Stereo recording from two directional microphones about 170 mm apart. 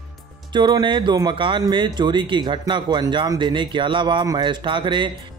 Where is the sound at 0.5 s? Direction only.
25° right (ahead or behind).